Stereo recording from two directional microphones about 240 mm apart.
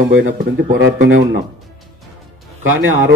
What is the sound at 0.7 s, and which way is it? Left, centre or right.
Speech, right.